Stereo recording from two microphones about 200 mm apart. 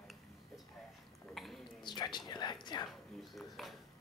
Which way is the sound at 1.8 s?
20° left (ahead or behind).